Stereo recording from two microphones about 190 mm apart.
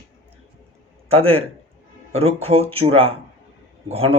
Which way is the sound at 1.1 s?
30° right (ahead or behind).